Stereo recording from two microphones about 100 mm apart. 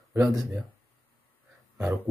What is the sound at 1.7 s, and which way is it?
Speech, 15° right (ahead or behind).